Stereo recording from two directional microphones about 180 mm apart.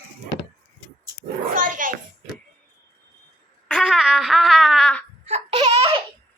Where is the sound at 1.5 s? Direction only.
50° right (ahead or behind).